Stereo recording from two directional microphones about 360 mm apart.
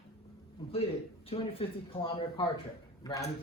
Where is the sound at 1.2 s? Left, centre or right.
Centre.